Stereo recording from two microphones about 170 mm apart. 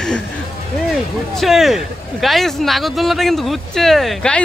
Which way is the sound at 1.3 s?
Centre (ahead or behind).